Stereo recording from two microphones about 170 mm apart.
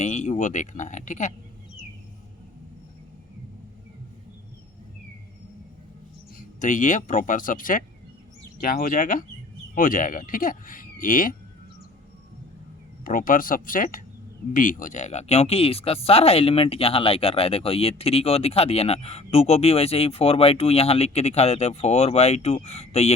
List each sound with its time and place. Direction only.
0.0 s speech: 45° left (ahead or behind)
6.6 s speech: 50° left (ahead or behind)
13.1 s speech: 55° left (ahead or behind); by 23.1 s 40° left (ahead or behind)